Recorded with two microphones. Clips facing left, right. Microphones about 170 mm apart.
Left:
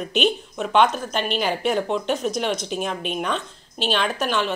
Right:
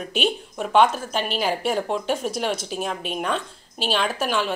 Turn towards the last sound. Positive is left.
turn(degrees=-5)  # may be behind; listen again after turning